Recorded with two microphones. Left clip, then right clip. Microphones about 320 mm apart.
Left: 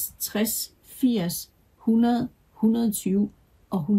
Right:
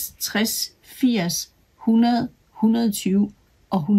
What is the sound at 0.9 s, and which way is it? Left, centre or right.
Speech, centre.